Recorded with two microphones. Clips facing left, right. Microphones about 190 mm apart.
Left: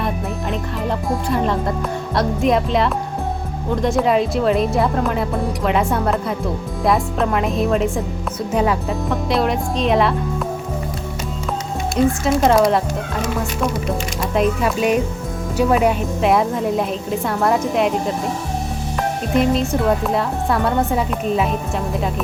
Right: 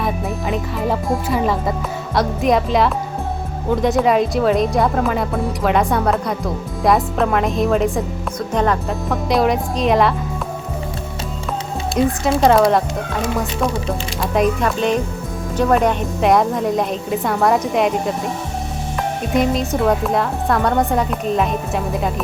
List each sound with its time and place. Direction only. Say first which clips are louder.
0.0 s music: right 1 dB; centre (ahead or behind)
2.1 s a woman's voice: right 1 dB; centre (ahead or behind)
12.2 s a woman's voice: right 3 dB; centre (ahead or behind)
14.2 s a woman's voice: right 2 dB; centre (ahead or behind)
19.3 s a woman's voice: left 1 dB; centre (ahead or behind)